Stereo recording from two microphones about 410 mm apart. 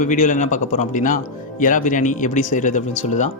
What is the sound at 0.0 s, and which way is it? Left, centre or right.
A man's voice, centre.